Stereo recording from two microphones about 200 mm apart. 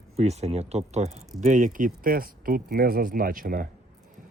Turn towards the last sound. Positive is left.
turn(degrees=-45)  # may be behind; listen again after turning